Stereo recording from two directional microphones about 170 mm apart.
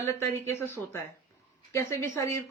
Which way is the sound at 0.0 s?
15° left (ahead or behind).